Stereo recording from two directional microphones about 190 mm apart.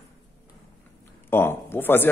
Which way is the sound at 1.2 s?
10° left (ahead or behind).